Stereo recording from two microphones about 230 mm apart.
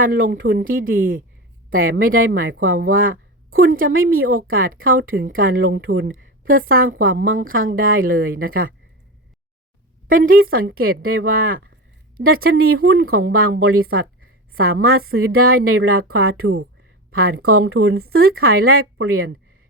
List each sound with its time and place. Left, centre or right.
0.0 s a woman's voice: right
10.1 s speech: right
10.8 s a woman's voice: right
11.3 s speech: right
12.2 s a woman's voice: right